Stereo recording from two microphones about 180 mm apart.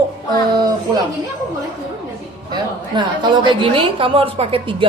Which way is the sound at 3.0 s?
25° right (ahead or behind).